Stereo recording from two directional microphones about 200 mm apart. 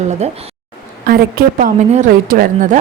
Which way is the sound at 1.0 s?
45° right (ahead or behind).